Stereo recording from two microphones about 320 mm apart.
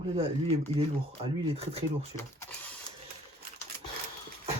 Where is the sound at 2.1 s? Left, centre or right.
Centre.